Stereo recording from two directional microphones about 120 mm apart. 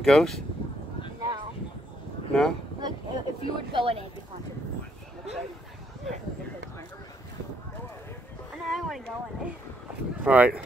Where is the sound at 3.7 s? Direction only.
50° right (ahead or behind).